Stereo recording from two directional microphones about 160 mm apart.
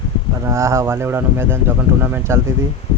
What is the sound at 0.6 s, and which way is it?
Speech, 20° right (ahead or behind).